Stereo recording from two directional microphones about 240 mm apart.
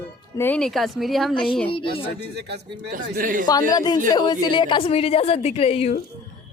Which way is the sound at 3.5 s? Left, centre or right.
Centre.